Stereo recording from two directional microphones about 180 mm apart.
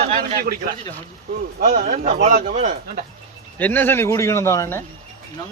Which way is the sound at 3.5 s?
10° left (ahead or behind).